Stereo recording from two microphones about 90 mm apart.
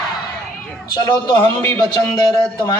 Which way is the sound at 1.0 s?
20° left (ahead or behind).